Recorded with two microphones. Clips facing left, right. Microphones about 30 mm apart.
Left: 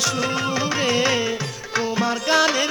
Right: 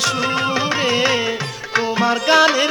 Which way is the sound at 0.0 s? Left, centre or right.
Right.